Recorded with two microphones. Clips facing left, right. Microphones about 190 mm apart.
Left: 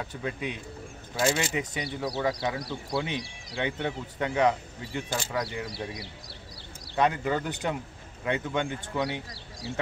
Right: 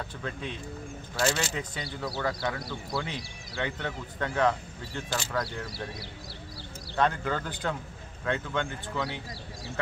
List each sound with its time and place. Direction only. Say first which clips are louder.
0.1 s a man's voice: left 3 dB; 15° left (ahead or behind)
7.0 s a man's voice: left 2 dB; 15° left (ahead or behind)